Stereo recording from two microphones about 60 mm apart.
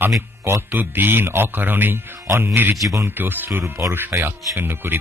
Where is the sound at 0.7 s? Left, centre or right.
Right.